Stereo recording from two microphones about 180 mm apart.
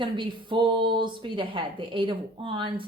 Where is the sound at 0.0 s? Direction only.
25° right (ahead or behind).